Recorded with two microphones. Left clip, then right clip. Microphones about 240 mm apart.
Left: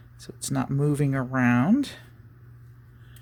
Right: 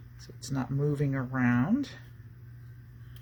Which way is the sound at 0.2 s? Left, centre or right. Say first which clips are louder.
Left 6 dB; left.